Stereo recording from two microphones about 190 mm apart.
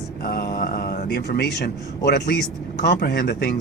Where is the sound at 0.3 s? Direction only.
50° left (ahead or behind).